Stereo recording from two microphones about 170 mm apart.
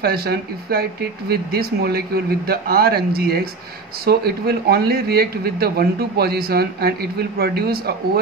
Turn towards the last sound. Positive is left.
turn(degrees=-65)  # may be behind; listen again after turning